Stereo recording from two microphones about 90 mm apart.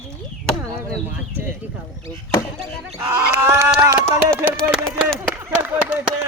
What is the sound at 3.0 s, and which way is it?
Chicken, 35° right (ahead or behind).